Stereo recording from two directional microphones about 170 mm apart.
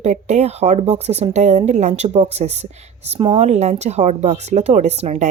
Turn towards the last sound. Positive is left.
turn(degrees=-40)  # may be behind; listen again after turning